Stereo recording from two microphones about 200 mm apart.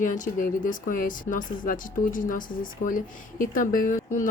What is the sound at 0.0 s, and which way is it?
A woman's voice, 40° left (ahead or behind).